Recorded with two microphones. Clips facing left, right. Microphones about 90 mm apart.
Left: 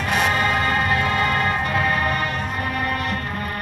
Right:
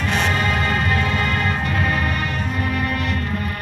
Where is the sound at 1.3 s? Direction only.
40° left (ahead or behind).